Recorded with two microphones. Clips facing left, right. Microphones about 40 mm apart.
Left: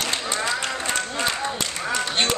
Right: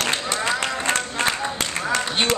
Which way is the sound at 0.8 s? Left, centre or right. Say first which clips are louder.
Right 3 dB; right.